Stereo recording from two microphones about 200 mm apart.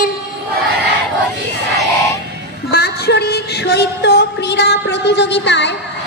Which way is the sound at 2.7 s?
55° left (ahead or behind).